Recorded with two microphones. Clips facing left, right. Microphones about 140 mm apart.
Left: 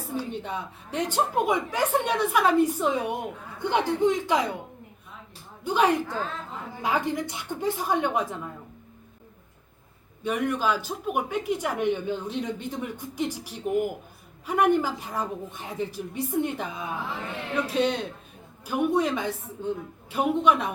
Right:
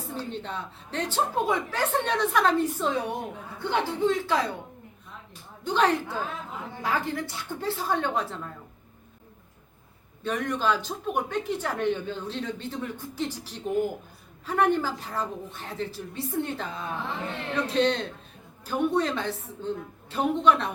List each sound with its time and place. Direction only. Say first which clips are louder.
0.1 s speech: left 3 dB; 10° left (ahead or behind)
5.6 s speech: left 1 dB; 10° left (ahead or behind)
6.1 s a woman's voice: left 1 dB; 10° right (ahead or behind)
6.8 s speech: left 2 dB; 15° left (ahead or behind)
10.2 s speech: left 1 dB; 10° left (ahead or behind)